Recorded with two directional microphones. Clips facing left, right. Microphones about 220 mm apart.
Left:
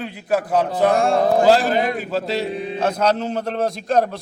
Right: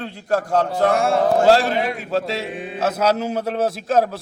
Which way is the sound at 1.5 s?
Centre (ahead or behind).